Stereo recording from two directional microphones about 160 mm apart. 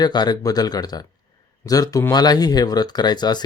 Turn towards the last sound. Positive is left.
turn(degrees=25)  # may be behind; listen again after turning